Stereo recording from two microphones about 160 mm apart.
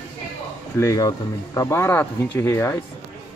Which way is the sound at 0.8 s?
20° left (ahead or behind).